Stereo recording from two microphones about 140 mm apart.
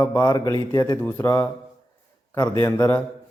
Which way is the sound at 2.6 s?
20° left (ahead or behind).